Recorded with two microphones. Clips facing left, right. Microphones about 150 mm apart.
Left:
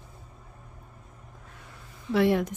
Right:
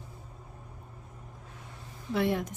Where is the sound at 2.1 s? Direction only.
90° left.